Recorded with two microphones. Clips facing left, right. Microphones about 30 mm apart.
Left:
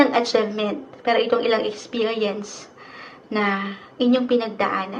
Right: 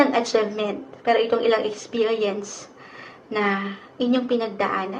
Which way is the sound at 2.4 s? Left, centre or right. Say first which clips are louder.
Even; left.